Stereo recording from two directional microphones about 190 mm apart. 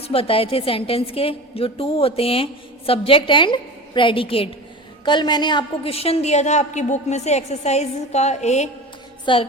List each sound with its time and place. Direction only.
0.1 s a woman's voice: 30° left (ahead or behind)